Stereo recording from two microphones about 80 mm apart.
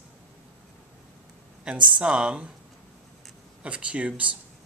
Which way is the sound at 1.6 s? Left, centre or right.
Centre.